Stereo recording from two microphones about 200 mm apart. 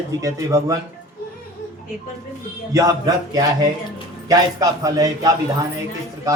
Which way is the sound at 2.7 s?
20° right (ahead or behind).